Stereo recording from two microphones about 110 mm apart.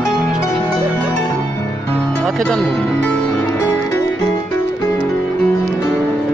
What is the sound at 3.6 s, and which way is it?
Music, 25° left (ahead or behind).